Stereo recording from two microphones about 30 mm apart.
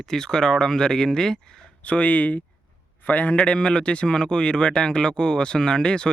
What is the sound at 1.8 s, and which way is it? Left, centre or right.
Speech, left.